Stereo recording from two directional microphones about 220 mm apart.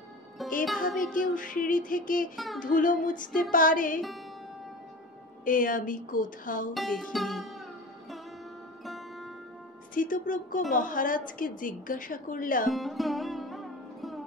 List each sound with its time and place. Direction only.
0.4 s music: centre (ahead or behind)
1.1 s a woman's voice: 35° left (ahead or behind)
2.3 s music: centre (ahead or behind)
2.6 s a woman's voice: 35° left (ahead or behind)
5.4 s a woman's voice: 40° left (ahead or behind)
6.7 s music: centre (ahead or behind)
8.8 s music: centre (ahead or behind)
9.9 s a woman's voice: 40° left (ahead or behind)
12.6 s music: centre (ahead or behind)